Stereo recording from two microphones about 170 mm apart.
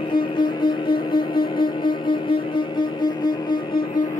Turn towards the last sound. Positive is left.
turn(degrees=25)  # may be behind; listen again after turning